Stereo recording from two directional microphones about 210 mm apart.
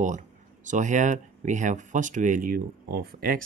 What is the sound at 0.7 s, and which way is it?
Speech, 35° right (ahead or behind).